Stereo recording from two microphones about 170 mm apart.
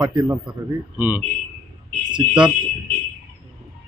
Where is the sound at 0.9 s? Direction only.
10° right (ahead or behind).